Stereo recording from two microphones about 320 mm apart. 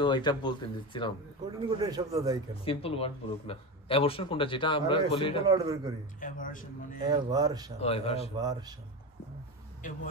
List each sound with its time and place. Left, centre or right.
0.0 s speech: centre
1.8 s speech: centre
2.6 s speech: centre
5.5 s speech: centre
6.2 s speech: left
7.0 s speech: centre
7.8 s speech: centre
8.4 s speech: centre
9.8 s speech: left